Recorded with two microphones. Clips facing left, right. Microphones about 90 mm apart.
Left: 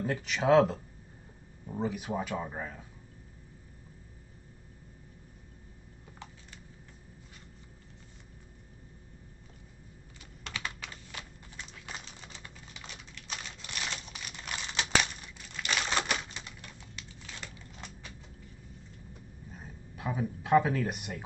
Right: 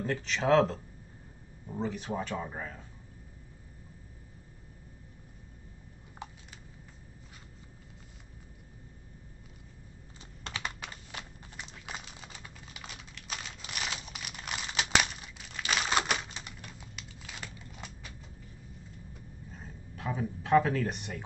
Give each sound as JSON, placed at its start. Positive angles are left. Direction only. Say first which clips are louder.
{"t": 0.0, "sound": "speech", "louder": "left 1 dB", "side_deg": 10}
{"t": 10.4, "sound": "typing", "louder": "right 1 dB", "side_deg": -20}
{"t": 11.7, "sound": "typing", "louder": "right 2 dB", "side_deg": -10}
{"t": 14.9, "sound": "crumpling", "louder": "right 1 dB", "side_deg": -5}
{"t": 19.5, "sound": "a sound", "louder": "even", "side_deg": 10}